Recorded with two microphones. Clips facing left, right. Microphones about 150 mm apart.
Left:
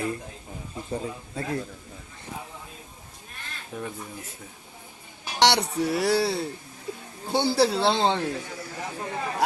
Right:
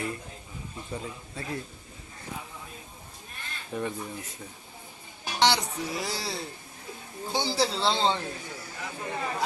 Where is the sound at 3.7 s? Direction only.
Centre (ahead or behind).